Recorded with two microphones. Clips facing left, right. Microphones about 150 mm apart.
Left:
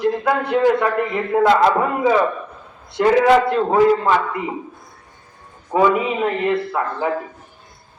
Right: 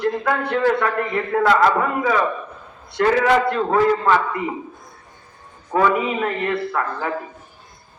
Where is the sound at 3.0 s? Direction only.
20° left (ahead or behind).